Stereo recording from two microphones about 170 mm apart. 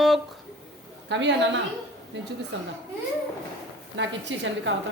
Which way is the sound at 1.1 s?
90° right.